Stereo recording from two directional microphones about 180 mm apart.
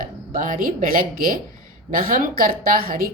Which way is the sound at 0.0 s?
50° right (ahead or behind).